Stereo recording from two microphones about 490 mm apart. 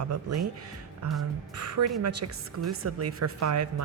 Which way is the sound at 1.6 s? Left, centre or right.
Right.